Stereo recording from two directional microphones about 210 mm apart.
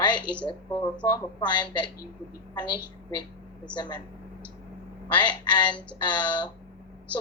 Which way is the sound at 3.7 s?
20° left (ahead or behind).